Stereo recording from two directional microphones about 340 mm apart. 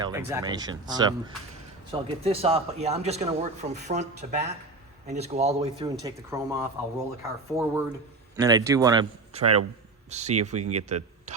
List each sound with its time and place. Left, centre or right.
0.0 s a man's voice: centre